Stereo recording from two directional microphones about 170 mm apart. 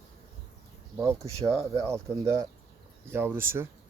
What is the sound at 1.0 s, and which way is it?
Speech, 20° right (ahead or behind).